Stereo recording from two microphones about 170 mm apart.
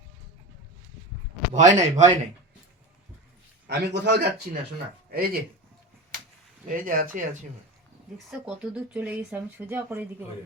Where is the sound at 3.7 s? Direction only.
80° right.